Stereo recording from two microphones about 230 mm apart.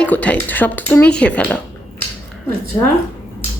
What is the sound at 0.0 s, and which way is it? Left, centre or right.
Speech, centre.